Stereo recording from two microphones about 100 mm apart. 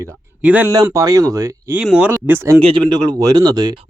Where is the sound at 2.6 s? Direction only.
55° right (ahead or behind); by 3.7 s 40° right (ahead or behind).